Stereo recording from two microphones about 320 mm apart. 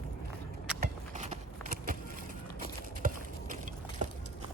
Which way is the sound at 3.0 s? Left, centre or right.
Right.